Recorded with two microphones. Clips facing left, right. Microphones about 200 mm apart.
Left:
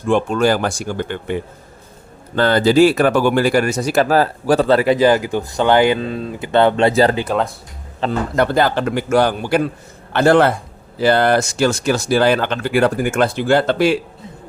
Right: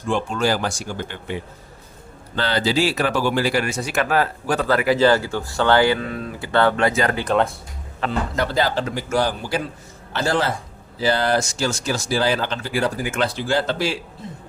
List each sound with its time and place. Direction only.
0.1 s speech: 55° left (ahead or behind); by 4.9 s 25° left (ahead or behind)
4.9 s speech: 15° left (ahead or behind)
8.4 s a man's voice: 55° left (ahead or behind)